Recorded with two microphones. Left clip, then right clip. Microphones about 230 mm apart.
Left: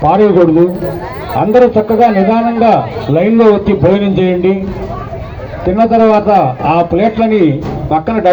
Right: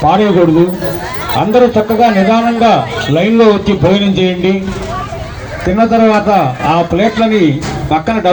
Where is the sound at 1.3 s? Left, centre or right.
Right.